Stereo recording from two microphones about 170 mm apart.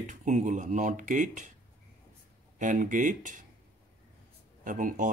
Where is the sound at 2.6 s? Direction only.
50° right (ahead or behind).